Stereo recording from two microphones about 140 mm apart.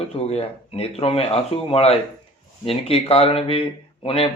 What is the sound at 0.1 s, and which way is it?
A man's voice, 45° left (ahead or behind).